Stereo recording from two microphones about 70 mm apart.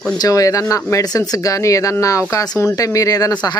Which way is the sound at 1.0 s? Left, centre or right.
Left.